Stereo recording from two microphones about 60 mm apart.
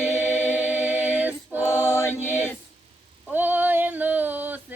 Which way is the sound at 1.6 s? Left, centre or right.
Left.